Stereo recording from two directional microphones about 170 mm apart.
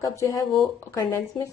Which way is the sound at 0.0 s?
20° left (ahead or behind).